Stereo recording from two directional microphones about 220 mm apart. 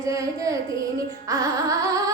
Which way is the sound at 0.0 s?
15° right (ahead or behind).